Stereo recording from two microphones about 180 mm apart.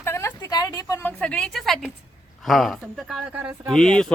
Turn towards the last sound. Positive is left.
turn(degrees=5)  # may be behind; listen again after turning